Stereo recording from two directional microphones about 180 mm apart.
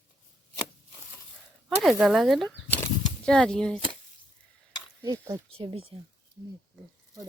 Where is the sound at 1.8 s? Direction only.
Centre (ahead or behind).